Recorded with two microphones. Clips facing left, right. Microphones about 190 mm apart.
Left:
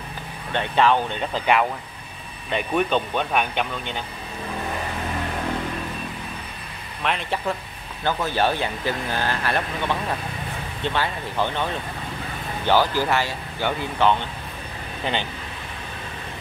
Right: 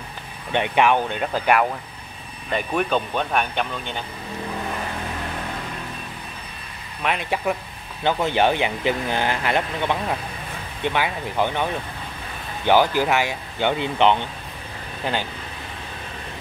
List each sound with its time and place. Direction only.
0.5 s speech: 15° right (ahead or behind); by 3.6 s centre (ahead or behind)
7.0 s speech: 10° right (ahead or behind)
15.0 s speech: 5° right (ahead or behind)